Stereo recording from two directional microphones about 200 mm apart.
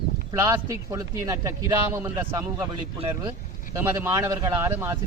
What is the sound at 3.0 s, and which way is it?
Speech, 25° right (ahead or behind).